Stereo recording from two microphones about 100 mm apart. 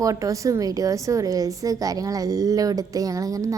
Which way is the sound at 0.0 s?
35° right (ahead or behind).